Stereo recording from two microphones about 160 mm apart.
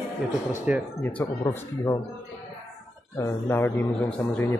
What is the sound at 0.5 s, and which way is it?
Speech, 10° right (ahead or behind).